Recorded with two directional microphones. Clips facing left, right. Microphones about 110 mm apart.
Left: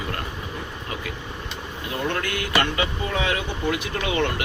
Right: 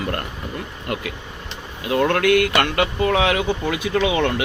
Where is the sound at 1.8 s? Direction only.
90° right.